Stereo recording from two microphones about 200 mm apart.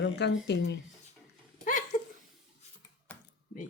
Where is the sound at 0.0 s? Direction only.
60° left (ahead or behind).